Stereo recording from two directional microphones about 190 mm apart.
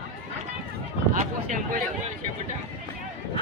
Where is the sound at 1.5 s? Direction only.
45° right (ahead or behind).